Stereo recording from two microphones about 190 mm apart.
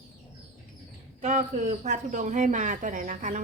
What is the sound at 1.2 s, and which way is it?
Speech, 40° right (ahead or behind).